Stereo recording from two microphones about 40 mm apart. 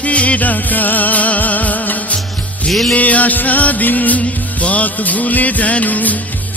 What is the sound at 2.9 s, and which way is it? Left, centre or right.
Music, left.